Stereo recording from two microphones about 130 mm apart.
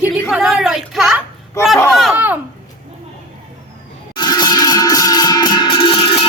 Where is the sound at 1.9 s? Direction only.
Centre (ahead or behind).